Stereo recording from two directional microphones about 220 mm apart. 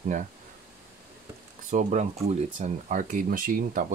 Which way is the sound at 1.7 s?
35° right (ahead or behind).